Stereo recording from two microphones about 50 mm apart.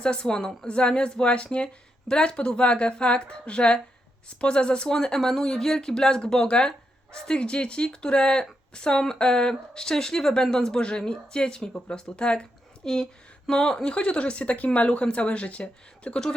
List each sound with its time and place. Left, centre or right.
0.0 s speech: centre